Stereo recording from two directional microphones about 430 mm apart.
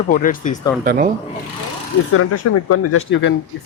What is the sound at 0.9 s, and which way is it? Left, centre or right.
Speech, centre.